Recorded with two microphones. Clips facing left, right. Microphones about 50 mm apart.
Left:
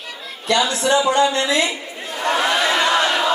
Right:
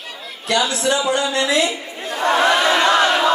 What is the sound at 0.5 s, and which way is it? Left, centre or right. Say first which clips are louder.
Speech: left 1 dB; left.